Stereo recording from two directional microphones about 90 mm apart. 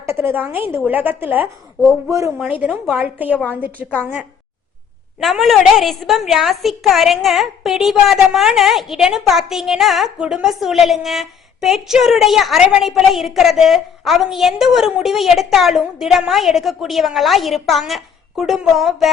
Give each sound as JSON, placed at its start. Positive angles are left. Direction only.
{"t": 0.0, "sound": "a woman's voice", "side_deg": -30}
{"t": 2.0, "sound": "speech", "side_deg": -35}
{"t": 3.0, "sound": "a woman's voice", "side_deg": -20}
{"t": 5.2, "sound": "a woman's voice", "side_deg": 0}